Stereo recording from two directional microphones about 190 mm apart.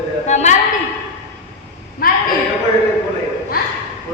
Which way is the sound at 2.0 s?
50° left (ahead or behind).